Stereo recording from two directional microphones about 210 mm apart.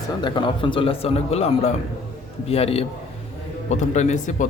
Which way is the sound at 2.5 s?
30° left (ahead or behind).